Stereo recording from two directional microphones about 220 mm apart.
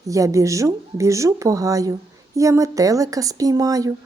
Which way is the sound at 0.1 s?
15° right (ahead or behind).